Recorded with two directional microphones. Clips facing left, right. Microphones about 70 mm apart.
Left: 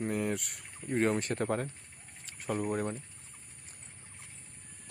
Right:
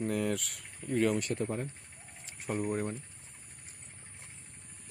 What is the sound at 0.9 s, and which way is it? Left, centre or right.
Speech, left.